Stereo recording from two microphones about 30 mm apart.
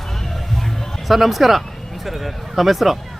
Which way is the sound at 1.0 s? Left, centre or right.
Centre.